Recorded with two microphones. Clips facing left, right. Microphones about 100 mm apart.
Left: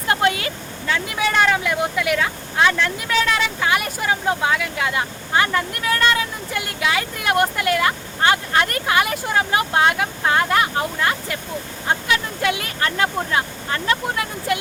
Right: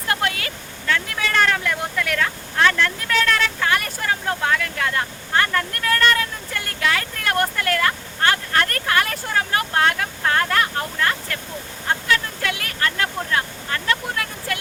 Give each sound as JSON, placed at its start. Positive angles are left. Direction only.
{"t": 0.1, "sound": "speech", "side_deg": 25}